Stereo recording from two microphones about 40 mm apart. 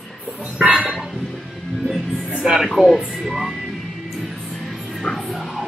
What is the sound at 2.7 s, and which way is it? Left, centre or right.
Speech, centre.